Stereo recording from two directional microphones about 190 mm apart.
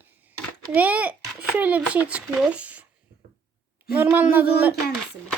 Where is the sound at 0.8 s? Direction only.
10° right (ahead or behind).